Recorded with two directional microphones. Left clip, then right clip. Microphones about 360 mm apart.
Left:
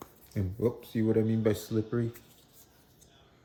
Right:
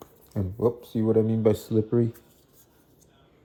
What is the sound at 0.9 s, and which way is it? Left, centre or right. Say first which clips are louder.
Speech: right 4 dB; right.